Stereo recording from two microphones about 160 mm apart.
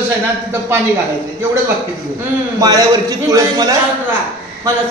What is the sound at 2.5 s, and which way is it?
A man's voice, 20° right (ahead or behind).